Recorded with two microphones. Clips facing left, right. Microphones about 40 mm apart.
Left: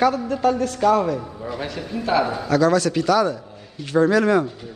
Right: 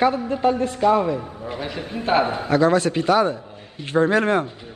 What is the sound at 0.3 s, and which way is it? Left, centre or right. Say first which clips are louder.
A man's voice: even; right.